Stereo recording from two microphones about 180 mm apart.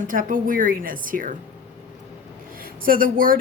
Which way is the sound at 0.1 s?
50° right (ahead or behind).